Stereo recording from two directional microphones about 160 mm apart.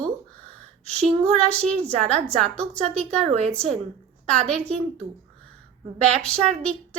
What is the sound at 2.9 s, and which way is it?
A woman's voice, 5° left (ahead or behind).